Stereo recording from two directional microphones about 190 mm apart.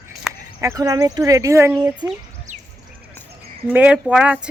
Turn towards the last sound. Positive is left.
turn(degrees=-5)  # may be behind; listen again after turning